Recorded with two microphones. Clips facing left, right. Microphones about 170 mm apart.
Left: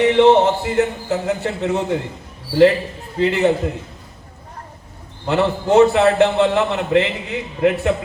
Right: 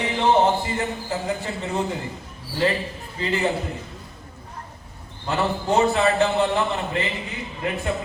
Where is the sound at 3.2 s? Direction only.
70° left (ahead or behind).